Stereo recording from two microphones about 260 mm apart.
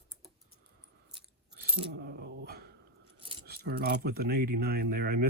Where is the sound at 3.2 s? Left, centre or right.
Centre.